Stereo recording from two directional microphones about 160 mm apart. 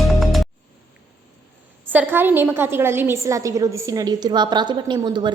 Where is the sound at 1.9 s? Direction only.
10° right (ahead or behind).